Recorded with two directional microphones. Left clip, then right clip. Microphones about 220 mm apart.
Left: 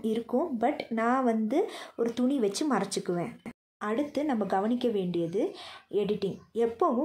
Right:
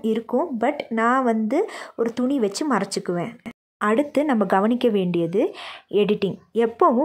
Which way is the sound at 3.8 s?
35° right (ahead or behind).